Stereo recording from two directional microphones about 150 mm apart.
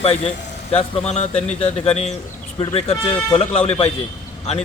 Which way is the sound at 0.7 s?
40° left (ahead or behind).